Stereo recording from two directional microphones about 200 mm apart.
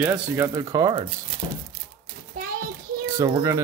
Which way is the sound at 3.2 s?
15° right (ahead or behind).